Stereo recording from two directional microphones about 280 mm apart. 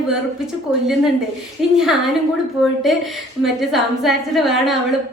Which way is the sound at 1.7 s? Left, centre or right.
Centre.